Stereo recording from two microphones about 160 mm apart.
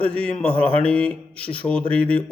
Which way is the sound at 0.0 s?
5° left (ahead or behind).